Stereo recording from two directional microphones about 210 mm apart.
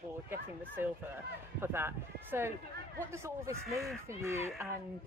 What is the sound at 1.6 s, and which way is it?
Speech, 10° right (ahead or behind).